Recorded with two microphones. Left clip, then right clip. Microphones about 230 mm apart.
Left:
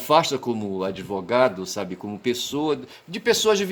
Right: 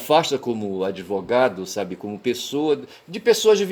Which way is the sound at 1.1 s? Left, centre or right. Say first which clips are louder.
Right 3 dB; left.